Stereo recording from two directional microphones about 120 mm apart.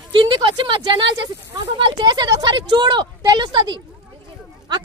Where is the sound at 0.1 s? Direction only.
45° right (ahead or behind).